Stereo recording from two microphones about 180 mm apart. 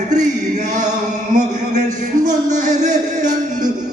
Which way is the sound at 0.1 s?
40° right (ahead or behind).